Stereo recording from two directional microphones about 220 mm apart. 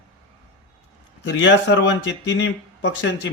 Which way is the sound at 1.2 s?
60° left (ahead or behind).